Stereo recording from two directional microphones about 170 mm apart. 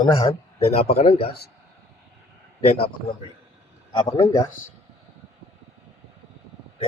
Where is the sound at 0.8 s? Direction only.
35° left (ahead or behind).